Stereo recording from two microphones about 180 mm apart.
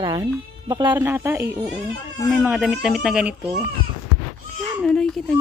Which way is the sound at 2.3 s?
5° right (ahead or behind).